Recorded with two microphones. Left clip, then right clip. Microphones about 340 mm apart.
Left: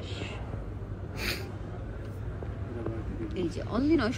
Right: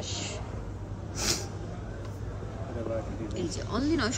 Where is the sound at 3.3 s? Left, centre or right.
Centre.